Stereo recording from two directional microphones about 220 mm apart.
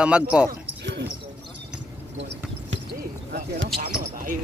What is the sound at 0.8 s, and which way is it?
Basketball bounce, 50° right (ahead or behind).